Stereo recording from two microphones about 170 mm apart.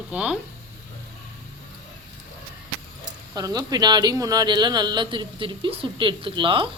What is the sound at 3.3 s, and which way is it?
Speech, 20° right (ahead or behind).